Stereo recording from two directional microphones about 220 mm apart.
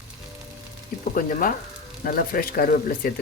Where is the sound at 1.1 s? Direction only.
40° left (ahead or behind).